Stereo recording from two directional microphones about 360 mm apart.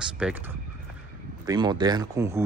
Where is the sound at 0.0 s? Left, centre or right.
Centre.